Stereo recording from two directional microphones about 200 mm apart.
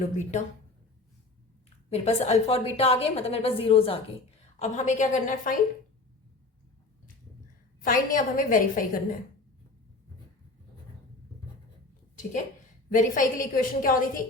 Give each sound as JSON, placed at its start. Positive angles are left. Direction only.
{"t": 0.0, "sound": "a woman's voice", "side_deg": 35}
{"t": 1.9, "sound": "a woman's voice", "side_deg": 30}
{"t": 7.8, "sound": "a woman's voice", "side_deg": 45}
{"t": 12.9, "sound": "a woman's voice", "side_deg": 40}